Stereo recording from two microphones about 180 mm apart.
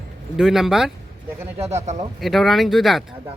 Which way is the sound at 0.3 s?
Centre (ahead or behind).